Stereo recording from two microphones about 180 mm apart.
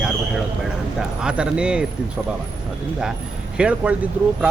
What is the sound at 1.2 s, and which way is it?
Speech, 5° right (ahead or behind).